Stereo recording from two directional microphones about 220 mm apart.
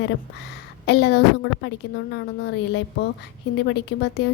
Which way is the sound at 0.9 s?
50° left (ahead or behind).